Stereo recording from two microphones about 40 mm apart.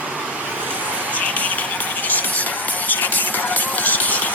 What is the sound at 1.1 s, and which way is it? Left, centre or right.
Music, left.